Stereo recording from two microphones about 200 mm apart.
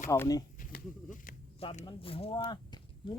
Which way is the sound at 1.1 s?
40° left (ahead or behind).